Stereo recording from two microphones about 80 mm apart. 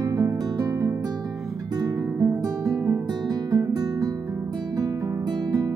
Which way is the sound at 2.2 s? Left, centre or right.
Right.